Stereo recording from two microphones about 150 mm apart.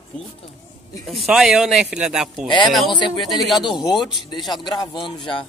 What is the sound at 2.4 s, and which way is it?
Speech, 30° left (ahead or behind).